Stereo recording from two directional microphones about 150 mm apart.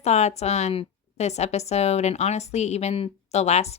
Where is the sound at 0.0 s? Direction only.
50° left (ahead or behind).